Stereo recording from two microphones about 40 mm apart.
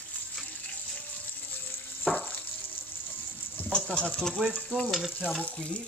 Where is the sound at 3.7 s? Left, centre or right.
Left.